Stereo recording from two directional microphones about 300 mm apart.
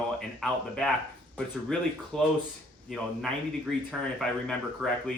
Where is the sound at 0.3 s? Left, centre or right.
Centre.